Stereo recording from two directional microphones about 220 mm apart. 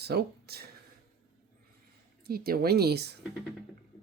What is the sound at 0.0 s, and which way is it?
Speech, 45° right (ahead or behind).